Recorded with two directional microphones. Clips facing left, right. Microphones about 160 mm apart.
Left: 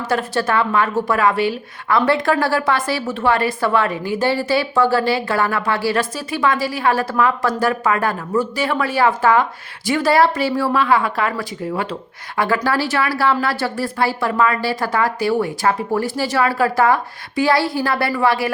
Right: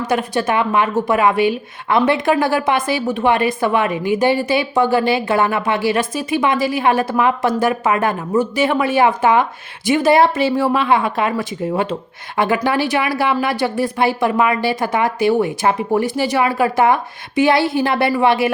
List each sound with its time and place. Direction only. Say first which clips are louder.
0.1 s a woman's voice: even; 20° right (ahead or behind)